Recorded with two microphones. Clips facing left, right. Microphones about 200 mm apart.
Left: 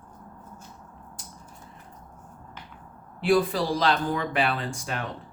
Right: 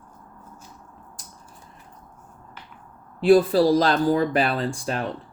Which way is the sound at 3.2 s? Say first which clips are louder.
Right 7 dB; 35° right (ahead or behind).